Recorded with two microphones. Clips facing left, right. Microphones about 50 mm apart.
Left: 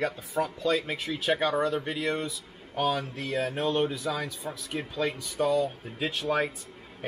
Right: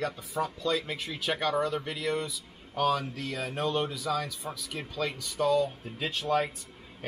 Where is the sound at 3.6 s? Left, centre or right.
Left.